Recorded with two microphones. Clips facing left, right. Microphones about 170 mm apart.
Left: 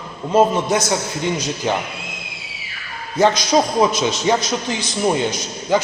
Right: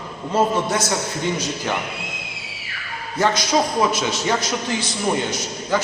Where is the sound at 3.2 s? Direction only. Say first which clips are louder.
Left 4 dB; 20° left (ahead or behind).